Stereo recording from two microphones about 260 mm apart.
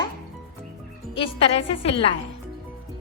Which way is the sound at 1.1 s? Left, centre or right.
Left.